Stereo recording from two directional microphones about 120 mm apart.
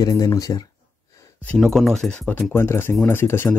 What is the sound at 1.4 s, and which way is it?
Speech, centre (ahead or behind).